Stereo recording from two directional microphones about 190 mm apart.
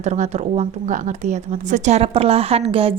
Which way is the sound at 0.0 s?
40° right (ahead or behind).